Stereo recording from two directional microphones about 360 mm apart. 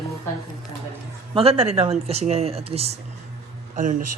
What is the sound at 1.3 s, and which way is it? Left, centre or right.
Speech, centre.